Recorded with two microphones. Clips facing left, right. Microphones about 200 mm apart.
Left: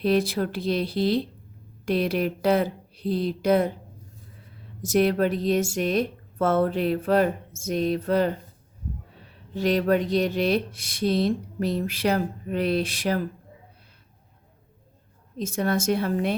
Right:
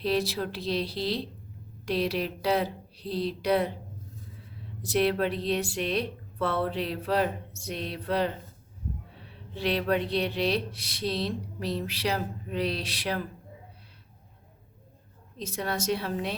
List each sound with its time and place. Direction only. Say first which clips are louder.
0.0 s speech: left 5 dB; 50° left (ahead or behind)
4.8 s speech: left 4 dB; 45° left (ahead or behind)
9.6 s speech: left 5 dB; 45° left (ahead or behind)
15.4 s speech: left 7 dB; 50° left (ahead or behind)